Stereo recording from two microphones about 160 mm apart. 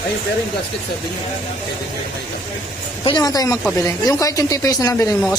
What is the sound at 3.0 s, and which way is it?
Speech, 25° left (ahead or behind).